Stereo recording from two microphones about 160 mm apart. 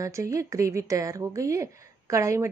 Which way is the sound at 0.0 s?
20° right (ahead or behind).